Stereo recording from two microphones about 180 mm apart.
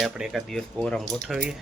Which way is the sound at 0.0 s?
Centre (ahead or behind).